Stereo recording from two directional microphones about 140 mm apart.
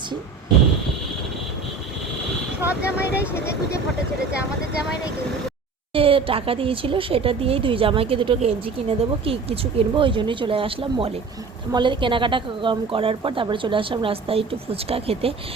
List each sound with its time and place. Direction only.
2.6 s vehicle: 10° right (ahead or behind)
3.0 s speech: 15° left (ahead or behind)
5.9 s speech: 40° right (ahead or behind)